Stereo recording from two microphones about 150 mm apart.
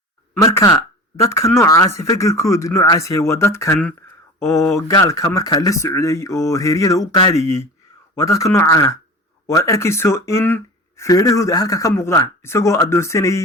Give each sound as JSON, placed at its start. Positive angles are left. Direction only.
{"t": 0.3, "sound": "speech", "side_deg": 20}
{"t": 4.9, "sound": "speech", "side_deg": 25}